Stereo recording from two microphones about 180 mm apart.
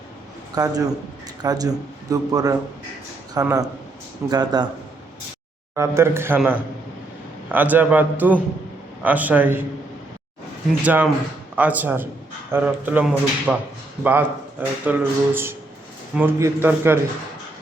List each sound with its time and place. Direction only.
0.5 s speech: 20° right (ahead or behind)
5.7 s speech: 15° right (ahead or behind)
10.8 s speech: 10° right (ahead or behind)